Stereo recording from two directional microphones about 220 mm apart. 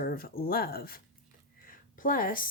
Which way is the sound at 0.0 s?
40° left (ahead or behind).